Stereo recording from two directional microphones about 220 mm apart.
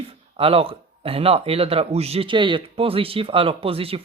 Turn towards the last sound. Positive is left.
turn(degrees=-25)  # may be behind; listen again after turning